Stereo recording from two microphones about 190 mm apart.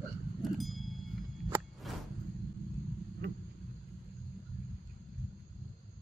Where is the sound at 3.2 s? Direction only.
60° right (ahead or behind).